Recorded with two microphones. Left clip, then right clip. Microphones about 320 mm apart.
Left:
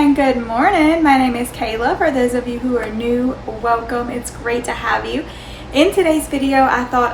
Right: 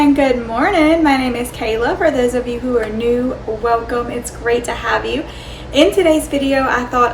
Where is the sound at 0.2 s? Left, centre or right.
Centre.